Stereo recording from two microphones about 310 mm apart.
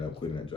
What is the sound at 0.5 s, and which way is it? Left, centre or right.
Speech, centre.